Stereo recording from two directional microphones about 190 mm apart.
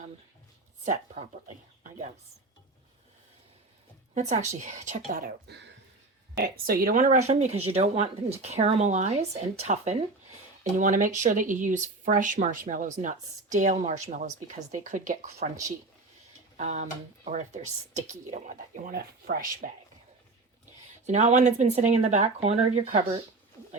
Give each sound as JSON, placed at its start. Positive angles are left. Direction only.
{"t": 4.1, "sound": "speech", "side_deg": -40}
{"t": 16.6, "sound": "speech", "side_deg": -35}
{"t": 21.1, "sound": "speech", "side_deg": -40}